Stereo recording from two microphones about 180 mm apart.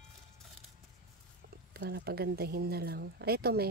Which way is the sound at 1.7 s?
65° right (ahead or behind).